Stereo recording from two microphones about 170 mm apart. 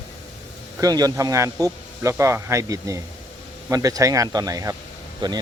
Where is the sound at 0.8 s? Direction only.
20° right (ahead or behind).